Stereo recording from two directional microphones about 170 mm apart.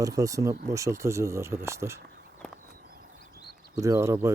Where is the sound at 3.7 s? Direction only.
20° right (ahead or behind).